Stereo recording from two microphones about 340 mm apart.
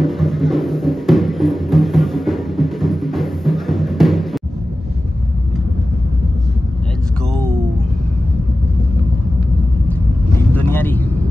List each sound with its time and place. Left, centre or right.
0.0 s music: centre
10.5 s vehicle: centre